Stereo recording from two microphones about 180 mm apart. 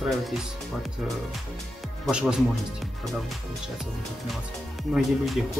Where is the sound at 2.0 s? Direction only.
5° right (ahead or behind).